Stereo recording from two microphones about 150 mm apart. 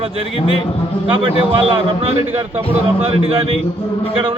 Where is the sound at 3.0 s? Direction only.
40° right (ahead or behind).